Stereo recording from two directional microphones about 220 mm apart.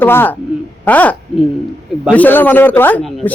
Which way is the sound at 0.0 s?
10° left (ahead or behind).